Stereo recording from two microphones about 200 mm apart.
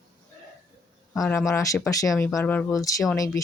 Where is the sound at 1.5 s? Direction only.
15° left (ahead or behind).